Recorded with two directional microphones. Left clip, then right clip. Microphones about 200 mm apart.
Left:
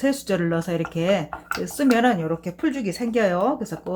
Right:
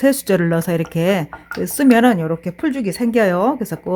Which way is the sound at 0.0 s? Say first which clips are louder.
Right 7 dB; 55° right (ahead or behind).